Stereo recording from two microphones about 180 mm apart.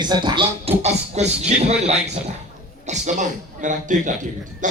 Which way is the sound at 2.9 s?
40° right (ahead or behind).